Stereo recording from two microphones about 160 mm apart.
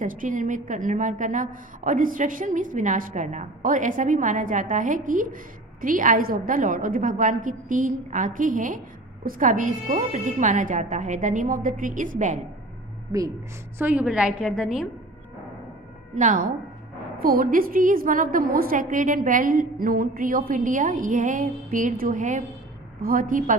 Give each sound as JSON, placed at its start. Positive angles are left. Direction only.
{"t": 0.0, "sound": "a woman's voice", "side_deg": -55}
{"t": 13.7, "sound": "a woman's voice", "side_deg": -10}
{"t": 16.2, "sound": "a woman's voice", "side_deg": -50}
{"t": 17.2, "sound": "a woman's voice", "side_deg": -65}